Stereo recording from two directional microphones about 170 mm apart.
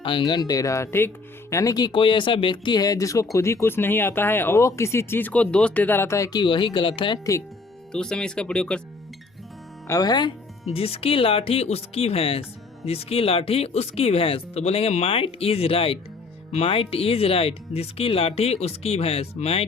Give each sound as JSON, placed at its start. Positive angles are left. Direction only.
{"t": 0.0, "sound": "speech", "side_deg": 30}
{"t": 7.9, "sound": "speech", "side_deg": 5}
{"t": 9.8, "sound": "speech", "side_deg": 20}
{"t": 10.7, "sound": "speech", "side_deg": 35}